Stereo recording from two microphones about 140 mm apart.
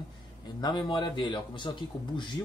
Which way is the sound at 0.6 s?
30° left (ahead or behind).